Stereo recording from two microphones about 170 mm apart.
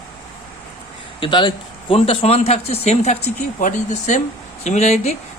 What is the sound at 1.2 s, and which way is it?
A man's voice, 25° left (ahead or behind).